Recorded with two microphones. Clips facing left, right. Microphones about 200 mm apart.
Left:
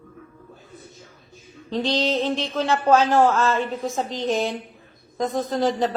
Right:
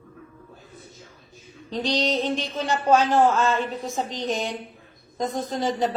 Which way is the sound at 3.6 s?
Centre (ahead or behind).